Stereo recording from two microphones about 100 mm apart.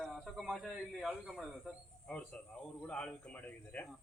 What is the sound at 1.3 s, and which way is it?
Speech, centre (ahead or behind).